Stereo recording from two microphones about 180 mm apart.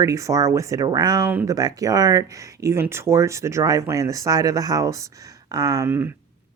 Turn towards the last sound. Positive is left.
turn(degrees=-15)  # may be behind; listen again after turning